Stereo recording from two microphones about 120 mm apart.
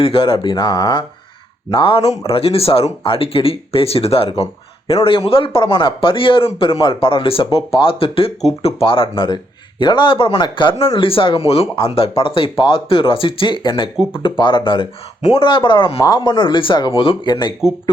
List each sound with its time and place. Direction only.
0.0 s speech: 50° left (ahead or behind)
16.0 s speech: 30° left (ahead or behind)